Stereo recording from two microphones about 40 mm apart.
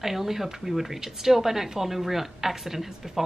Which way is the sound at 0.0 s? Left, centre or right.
Centre.